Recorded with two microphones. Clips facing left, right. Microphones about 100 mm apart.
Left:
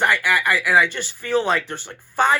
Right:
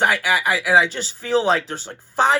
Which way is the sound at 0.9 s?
15° right (ahead or behind).